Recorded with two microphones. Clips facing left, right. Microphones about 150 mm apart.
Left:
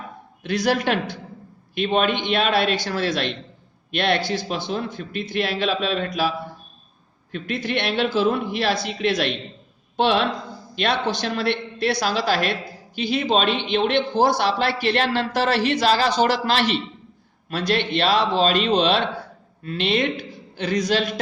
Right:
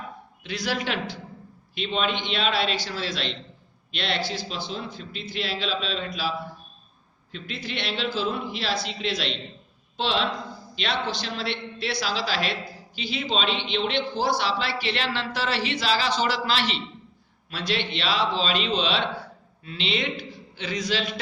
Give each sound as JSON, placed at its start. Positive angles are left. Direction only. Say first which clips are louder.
{"t": 0.4, "sound": "a man's voice", "louder": "left 8 dB", "side_deg": 50}
{"t": 7.3, "sound": "speech", "louder": "left 8 dB", "side_deg": 60}
{"t": 10.9, "sound": "a man's voice", "louder": "left 5 dB", "side_deg": 20}
{"t": 11.2, "sound": "a man's voice", "louder": "left 7 dB", "side_deg": 55}